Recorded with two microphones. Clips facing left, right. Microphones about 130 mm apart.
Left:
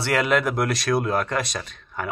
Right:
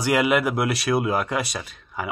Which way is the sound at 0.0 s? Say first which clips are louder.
Right 1 dB; 10° right (ahead or behind).